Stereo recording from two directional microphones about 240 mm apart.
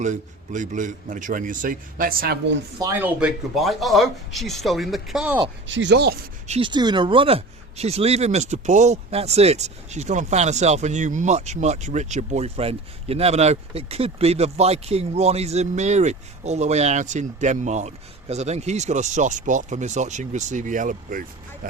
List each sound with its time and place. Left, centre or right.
0.0 s a man's voice: right
2.7 s speech: centre
5.6 s speech: right
6.5 s speech: centre